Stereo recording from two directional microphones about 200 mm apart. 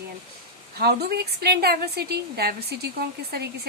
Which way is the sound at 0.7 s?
55° right (ahead or behind).